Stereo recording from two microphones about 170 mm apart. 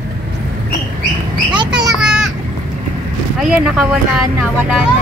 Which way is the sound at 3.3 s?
5° right (ahead or behind).